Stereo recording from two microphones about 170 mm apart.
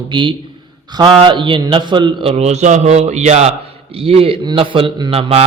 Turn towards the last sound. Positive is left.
turn(degrees=-35)  # may be behind; listen again after turning